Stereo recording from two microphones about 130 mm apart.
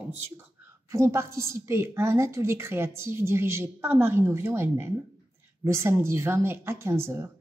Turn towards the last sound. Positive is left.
turn(degrees=-20)  # may be behind; listen again after turning